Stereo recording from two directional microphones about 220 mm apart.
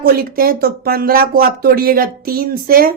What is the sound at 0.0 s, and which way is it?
Speech, 40° right (ahead or behind).